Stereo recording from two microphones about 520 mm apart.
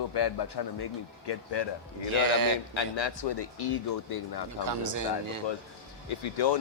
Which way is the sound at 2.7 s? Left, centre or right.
Left.